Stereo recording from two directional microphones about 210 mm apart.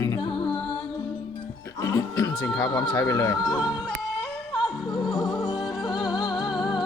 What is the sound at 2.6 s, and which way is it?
Speech, 20° left (ahead or behind).